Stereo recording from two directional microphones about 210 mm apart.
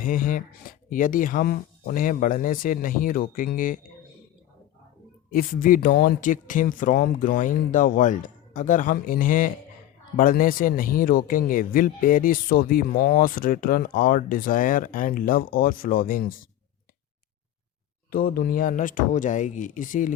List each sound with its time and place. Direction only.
0.0 s speech: 40° left (ahead or behind)
5.3 s speech: 40° left (ahead or behind)
18.1 s speech: 45° left (ahead or behind)